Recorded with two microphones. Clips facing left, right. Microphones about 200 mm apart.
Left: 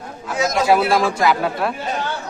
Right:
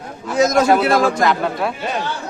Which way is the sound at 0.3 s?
45° right (ahead or behind).